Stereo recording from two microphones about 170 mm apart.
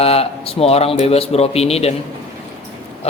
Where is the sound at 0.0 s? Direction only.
35° left (ahead or behind).